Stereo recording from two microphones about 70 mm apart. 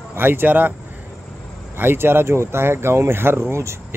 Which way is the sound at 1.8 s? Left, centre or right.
Right.